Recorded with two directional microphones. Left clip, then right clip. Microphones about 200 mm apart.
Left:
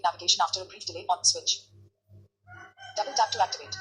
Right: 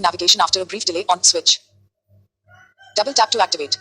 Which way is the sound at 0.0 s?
45° right (ahead or behind).